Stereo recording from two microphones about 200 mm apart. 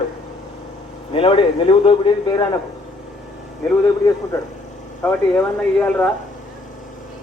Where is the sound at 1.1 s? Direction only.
25° left (ahead or behind).